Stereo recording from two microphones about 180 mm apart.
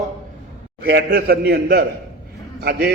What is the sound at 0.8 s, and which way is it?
A man's voice, 60° right (ahead or behind).